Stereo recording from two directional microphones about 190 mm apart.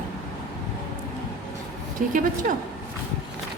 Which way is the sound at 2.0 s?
45° right (ahead or behind).